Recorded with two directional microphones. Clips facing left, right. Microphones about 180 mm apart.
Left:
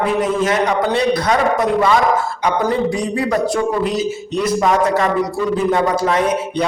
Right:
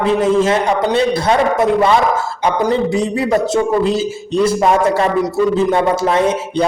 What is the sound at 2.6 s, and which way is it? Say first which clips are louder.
A man's voice: right 4 dB; 25° right (ahead or behind).